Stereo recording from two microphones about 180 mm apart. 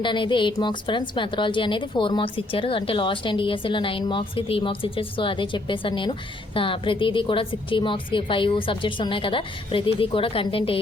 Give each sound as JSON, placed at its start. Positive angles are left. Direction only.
{"t": 0.0, "sound": "a woman's voice", "side_deg": 25}